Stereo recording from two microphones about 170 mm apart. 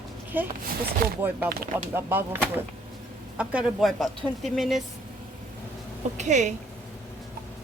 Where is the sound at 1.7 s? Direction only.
10° right (ahead or behind).